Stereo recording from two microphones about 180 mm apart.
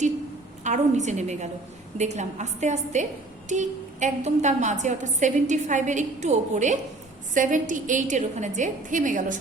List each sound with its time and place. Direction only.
0.6 s a woman's voice: 40° right (ahead or behind)